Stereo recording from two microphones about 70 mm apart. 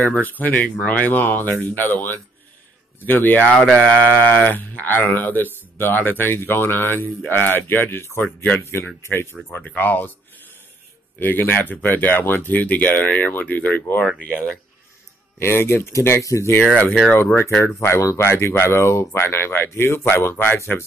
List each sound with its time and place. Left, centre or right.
0.0 s speech: left
3.5 s speech: centre
3.8 s speech: left
15.3 s speech: left